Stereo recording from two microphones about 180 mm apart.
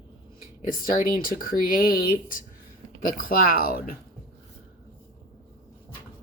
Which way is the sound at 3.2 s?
50° left (ahead or behind).